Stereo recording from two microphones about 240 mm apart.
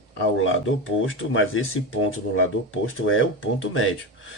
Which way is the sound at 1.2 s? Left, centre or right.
Left.